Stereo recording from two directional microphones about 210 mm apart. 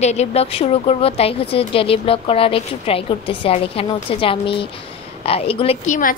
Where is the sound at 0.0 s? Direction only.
30° left (ahead or behind).